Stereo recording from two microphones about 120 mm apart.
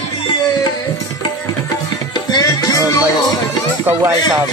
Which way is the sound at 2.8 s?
30° left (ahead or behind).